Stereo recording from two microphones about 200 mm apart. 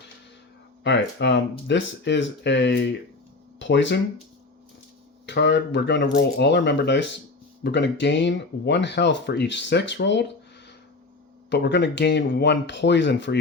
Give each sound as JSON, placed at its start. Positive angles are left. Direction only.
{"t": 0.9, "sound": "speech", "side_deg": 60}
{"t": 5.2, "sound": "speech", "side_deg": 60}
{"t": 11.4, "sound": "speech", "side_deg": 60}